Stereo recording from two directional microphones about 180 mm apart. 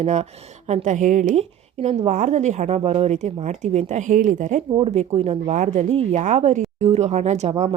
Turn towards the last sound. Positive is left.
turn(degrees=-40)  # may be behind; listen again after turning